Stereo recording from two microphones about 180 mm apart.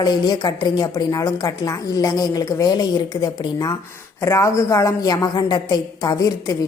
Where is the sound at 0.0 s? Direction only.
25° left (ahead or behind).